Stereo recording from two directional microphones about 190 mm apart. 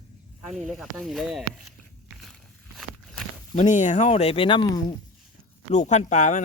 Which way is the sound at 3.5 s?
40° left (ahead or behind).